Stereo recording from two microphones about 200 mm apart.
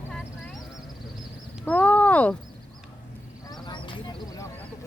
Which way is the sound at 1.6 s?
5° left (ahead or behind).